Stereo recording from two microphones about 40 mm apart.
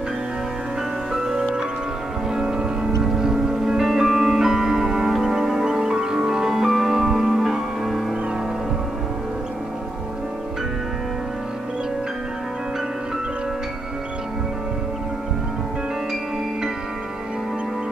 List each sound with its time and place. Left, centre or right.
1.3 s music: centre